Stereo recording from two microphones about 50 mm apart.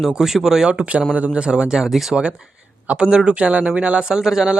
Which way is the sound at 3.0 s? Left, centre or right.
Centre.